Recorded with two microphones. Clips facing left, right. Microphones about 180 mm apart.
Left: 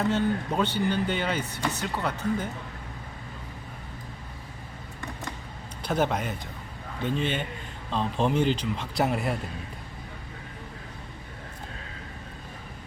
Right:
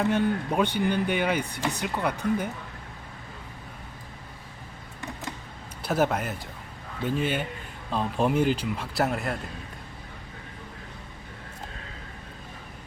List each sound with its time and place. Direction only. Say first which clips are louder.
0.0 s speech: right 1 dB; 15° right (ahead or behind)
5.8 s speech: right 1 dB; 5° right (ahead or behind)